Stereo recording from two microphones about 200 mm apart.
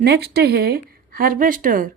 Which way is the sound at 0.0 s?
55° right (ahead or behind).